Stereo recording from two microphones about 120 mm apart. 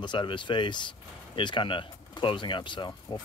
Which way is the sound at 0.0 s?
40° left (ahead or behind).